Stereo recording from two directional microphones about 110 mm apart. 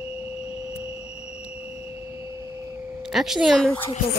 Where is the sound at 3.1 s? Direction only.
5° right (ahead or behind).